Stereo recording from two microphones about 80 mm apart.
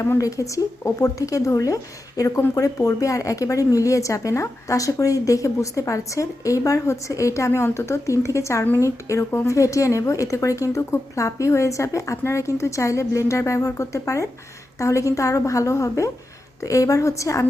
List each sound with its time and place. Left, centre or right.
0.2 s a woman's voice: left